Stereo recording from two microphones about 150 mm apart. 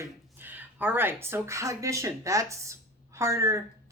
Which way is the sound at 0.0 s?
15° right (ahead or behind).